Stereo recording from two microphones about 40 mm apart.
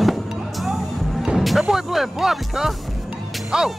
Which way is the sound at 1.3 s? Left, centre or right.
Centre.